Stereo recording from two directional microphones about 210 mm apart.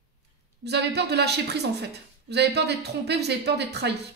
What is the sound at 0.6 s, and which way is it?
A woman's voice, 50° right (ahead or behind).